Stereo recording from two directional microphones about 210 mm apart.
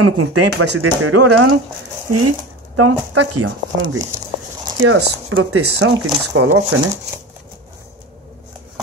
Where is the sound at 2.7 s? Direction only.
90° right.